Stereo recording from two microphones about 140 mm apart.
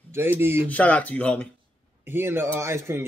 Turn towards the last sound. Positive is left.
turn(degrees=-20)  # may be behind; listen again after turning